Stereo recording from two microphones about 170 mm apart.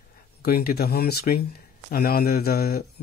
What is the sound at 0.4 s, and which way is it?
Speech, 65° left (ahead or behind).